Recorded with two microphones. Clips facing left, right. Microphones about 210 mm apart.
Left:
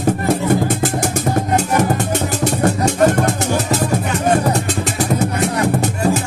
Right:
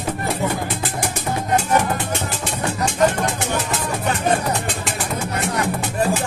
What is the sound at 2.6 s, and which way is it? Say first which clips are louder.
Music: left 4 dB; 40° left (ahead or behind).